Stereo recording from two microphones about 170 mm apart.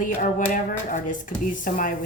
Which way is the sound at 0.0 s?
50° left (ahead or behind).